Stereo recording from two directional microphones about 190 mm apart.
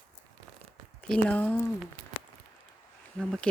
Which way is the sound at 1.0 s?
5° left (ahead or behind).